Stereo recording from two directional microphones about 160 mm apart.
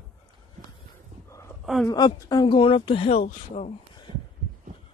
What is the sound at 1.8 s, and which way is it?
Speech, 25° left (ahead or behind).